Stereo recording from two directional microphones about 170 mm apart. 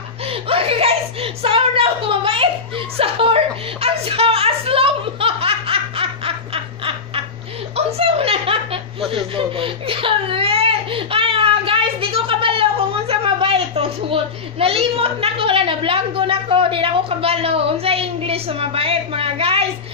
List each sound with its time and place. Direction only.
0.2 s chuckle: 35° right (ahead or behind)
9.1 s speech: 30° right (ahead or behind)